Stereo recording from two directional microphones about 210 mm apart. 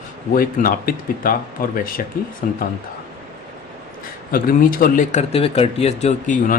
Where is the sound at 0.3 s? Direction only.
45° left (ahead or behind).